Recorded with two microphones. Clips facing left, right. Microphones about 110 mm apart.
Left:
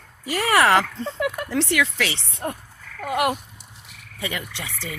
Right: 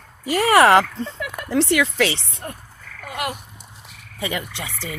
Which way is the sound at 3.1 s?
5° left (ahead or behind).